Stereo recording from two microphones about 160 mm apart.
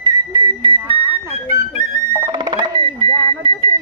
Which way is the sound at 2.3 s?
25° right (ahead or behind).